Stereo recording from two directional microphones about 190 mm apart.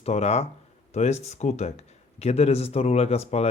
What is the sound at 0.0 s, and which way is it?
Speech, 35° left (ahead or behind).